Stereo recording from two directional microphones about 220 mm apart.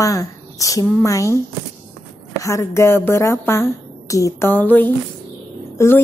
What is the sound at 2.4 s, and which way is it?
A woman's voice, 10° left (ahead or behind).